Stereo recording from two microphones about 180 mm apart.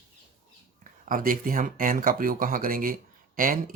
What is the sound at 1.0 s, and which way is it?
Speech, 50° right (ahead or behind).